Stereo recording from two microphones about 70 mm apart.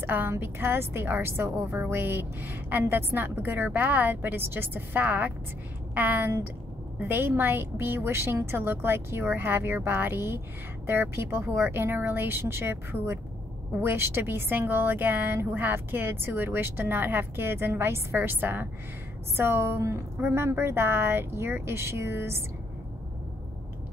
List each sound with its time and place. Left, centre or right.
0.0 s a woman's voice: right